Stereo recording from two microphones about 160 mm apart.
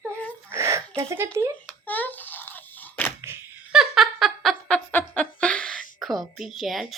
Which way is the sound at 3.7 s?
Centre (ahead or behind).